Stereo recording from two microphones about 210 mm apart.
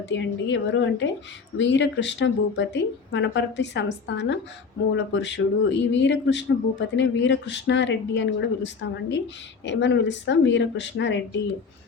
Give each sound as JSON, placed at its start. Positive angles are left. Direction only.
{"t": 0.1, "sound": "speech", "side_deg": 60}